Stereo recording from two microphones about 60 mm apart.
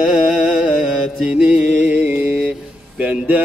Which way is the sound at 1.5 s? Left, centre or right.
Right.